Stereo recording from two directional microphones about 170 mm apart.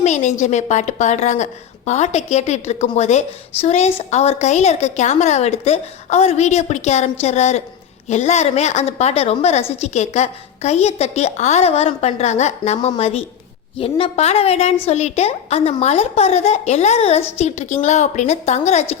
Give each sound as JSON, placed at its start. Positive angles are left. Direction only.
{"t": 0.0, "sound": "a woman's voice", "side_deg": 45}